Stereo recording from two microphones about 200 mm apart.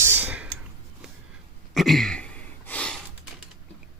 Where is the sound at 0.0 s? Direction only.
10° right (ahead or behind).